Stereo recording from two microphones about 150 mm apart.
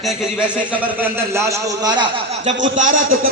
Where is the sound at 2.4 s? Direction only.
55° right (ahead or behind).